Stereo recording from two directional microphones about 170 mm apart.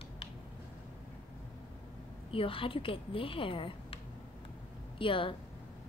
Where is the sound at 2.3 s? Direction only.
30° left (ahead or behind).